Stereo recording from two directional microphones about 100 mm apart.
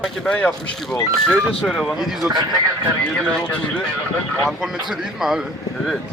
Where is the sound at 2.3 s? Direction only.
40° right (ahead or behind).